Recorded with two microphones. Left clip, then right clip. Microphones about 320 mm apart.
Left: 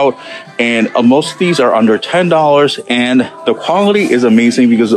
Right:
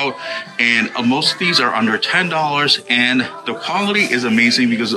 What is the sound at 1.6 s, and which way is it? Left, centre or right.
Speech, centre.